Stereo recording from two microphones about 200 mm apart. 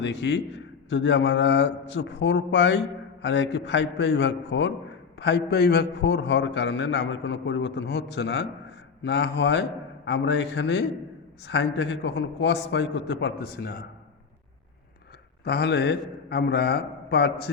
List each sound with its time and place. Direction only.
0.0 s a man's voice: 65° left (ahead or behind)
15.4 s a man's voice: 55° left (ahead or behind)